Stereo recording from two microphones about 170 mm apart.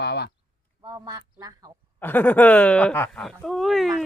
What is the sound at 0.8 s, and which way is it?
Speech, 20° right (ahead or behind).